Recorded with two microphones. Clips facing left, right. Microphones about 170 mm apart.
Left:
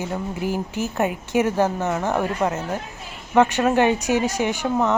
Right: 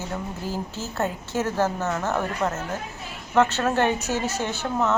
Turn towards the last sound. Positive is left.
turn(degrees=15)  # may be behind; listen again after turning